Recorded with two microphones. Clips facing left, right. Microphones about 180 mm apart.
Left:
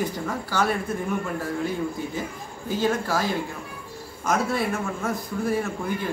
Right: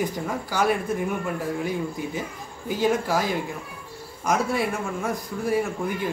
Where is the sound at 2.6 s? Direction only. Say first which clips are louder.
Right 1 dB; 15° right (ahead or behind).